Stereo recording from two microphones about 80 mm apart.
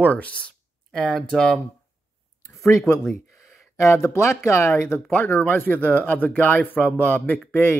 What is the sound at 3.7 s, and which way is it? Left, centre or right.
Speech, left.